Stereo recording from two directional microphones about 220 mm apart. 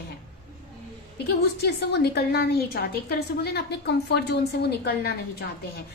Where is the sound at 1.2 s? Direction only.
50° left (ahead or behind).